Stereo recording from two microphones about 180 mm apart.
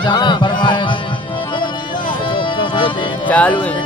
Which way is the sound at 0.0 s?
25° left (ahead or behind).